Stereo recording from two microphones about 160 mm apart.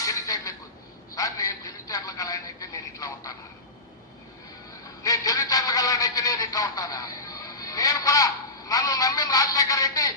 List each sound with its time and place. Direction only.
0.0 s a sound: 20° left (ahead or behind)
1.1 s a man's voice: 20° left (ahead or behind)
5.0 s a man's voice: 20° left (ahead or behind)